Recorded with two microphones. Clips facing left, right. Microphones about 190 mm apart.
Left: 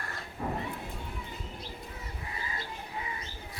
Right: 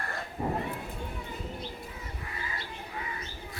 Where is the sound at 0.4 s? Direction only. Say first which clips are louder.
Right 3 dB; 25° right (ahead or behind).